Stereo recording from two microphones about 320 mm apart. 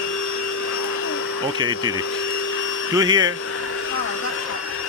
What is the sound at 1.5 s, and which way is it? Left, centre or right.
Speech, centre.